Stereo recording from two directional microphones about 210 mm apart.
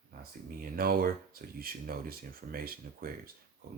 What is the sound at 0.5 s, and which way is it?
Speech, 45° right (ahead or behind).